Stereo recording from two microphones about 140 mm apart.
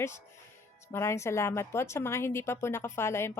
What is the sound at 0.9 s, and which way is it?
A woman's voice, 20° left (ahead or behind).